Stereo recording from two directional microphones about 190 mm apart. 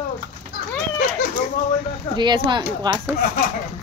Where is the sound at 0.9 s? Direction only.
45° left (ahead or behind).